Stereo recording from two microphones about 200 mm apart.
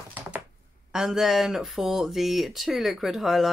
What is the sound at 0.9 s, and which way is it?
Speech, centre (ahead or behind).